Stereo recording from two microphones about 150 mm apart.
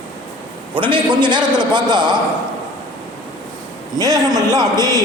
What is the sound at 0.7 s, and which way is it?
A man's voice, 35° right (ahead or behind).